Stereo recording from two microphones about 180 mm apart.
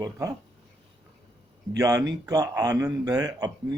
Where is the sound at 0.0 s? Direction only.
20° right (ahead or behind).